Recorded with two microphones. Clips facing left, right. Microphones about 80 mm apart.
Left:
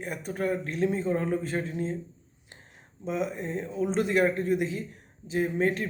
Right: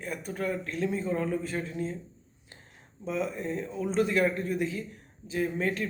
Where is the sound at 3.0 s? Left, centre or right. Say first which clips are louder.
Left 1 dB; left.